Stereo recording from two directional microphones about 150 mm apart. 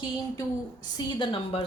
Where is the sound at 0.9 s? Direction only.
35° left (ahead or behind).